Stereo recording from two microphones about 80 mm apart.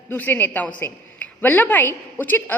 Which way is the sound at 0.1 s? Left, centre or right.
Left.